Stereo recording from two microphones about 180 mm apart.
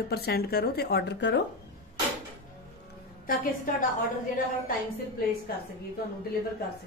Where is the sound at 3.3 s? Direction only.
50° left (ahead or behind).